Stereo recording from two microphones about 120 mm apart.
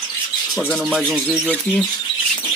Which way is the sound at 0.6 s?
5° right (ahead or behind).